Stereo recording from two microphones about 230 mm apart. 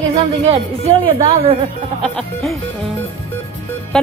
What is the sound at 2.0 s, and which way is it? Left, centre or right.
Speech, centre.